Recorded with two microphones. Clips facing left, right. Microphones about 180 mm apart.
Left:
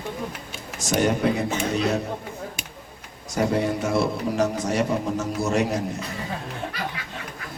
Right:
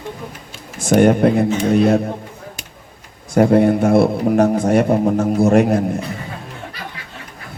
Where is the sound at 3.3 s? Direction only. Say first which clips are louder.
Right 10 dB; 55° right (ahead or behind).